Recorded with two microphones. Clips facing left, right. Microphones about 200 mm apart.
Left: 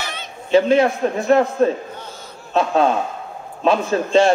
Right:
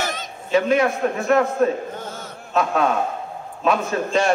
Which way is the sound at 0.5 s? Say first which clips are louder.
Left 4 dB; 30° left (ahead or behind).